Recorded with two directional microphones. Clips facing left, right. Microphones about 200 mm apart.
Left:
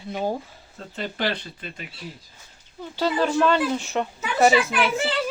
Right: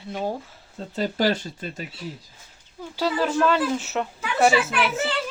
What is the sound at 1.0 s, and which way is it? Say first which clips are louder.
Speech: right 5 dB; 40° right (ahead or behind).